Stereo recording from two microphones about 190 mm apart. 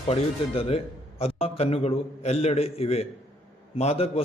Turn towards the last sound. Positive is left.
turn(degrees=35)  # may be behind; listen again after turning